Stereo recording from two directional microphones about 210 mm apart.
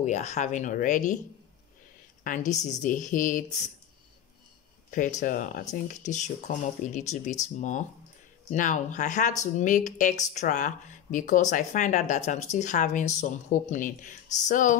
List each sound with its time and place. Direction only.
0.0 s speech: 35° left (ahead or behind)
2.2 s speech: 35° left (ahead or behind)
5.2 s speech: 40° left (ahead or behind)
8.5 s speech: 35° left (ahead or behind)